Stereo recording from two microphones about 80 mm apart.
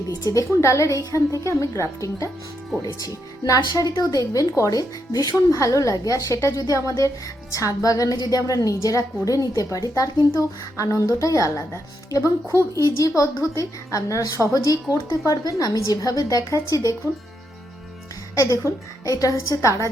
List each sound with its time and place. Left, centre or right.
0.1 s a woman's voice: left
5.5 s a woman's voice: left
18.3 s a woman's voice: left